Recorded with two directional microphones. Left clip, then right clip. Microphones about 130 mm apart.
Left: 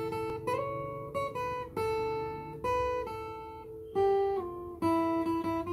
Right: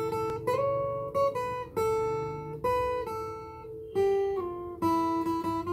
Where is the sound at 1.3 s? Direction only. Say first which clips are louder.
Right 3 dB; 10° right (ahead or behind).